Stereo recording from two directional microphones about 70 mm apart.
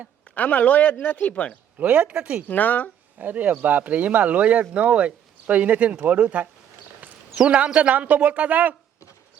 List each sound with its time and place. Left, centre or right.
0.3 s speech: left
1.8 s speech: right
2.5 s speech: left
3.2 s speech: right